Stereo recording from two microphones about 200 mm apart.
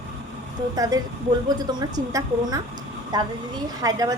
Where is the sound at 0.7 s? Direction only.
20° right (ahead or behind).